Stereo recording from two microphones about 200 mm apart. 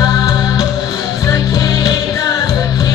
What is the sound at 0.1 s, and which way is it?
Music, 20° left (ahead or behind).